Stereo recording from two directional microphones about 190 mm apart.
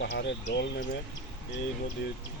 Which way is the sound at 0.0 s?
70° left (ahead or behind).